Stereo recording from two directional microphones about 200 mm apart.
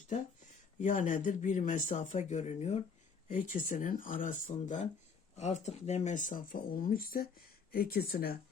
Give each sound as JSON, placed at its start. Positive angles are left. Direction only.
{"t": 0.8, "sound": "speech", "side_deg": 40}